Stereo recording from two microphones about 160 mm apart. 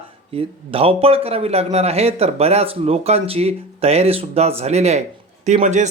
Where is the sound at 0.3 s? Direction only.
35° right (ahead or behind).